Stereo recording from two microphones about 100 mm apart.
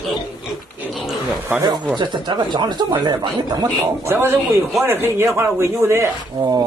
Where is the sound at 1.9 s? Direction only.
50° right (ahead or behind).